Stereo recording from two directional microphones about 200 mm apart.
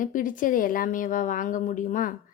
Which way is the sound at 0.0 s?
40° left (ahead or behind).